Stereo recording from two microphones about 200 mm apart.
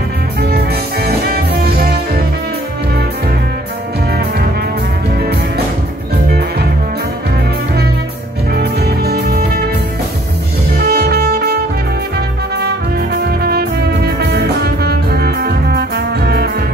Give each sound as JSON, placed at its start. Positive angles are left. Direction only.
{"t": 1.0, "sound": "music", "side_deg": -50}
{"t": 8.5, "sound": "music", "side_deg": -55}
{"t": 10.8, "sound": "music", "side_deg": -50}
{"t": 13.2, "sound": "music", "side_deg": -55}